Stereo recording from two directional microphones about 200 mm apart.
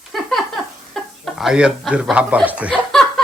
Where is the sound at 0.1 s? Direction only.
Centre (ahead or behind).